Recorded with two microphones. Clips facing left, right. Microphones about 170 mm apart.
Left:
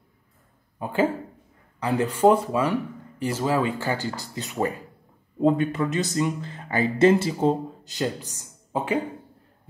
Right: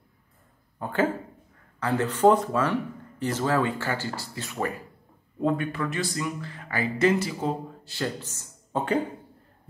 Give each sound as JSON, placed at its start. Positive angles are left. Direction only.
{"t": 0.7, "sound": "speech", "side_deg": 10}